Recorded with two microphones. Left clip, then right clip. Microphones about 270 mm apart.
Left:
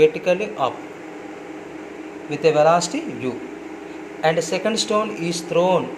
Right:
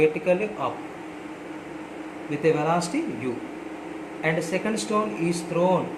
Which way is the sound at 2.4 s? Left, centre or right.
Centre.